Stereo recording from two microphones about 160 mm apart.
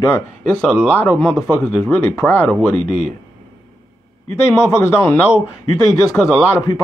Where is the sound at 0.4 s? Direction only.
5° left (ahead or behind).